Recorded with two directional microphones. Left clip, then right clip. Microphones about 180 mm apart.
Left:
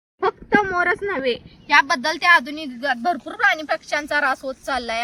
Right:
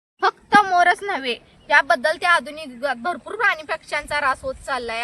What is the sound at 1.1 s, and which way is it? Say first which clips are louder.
A woman's voice: left 2 dB; 35° right (ahead or behind).